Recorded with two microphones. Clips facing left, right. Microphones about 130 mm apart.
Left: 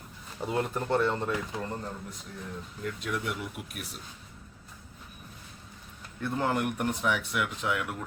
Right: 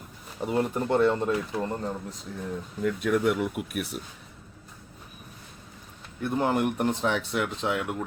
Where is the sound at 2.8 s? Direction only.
50° right (ahead or behind).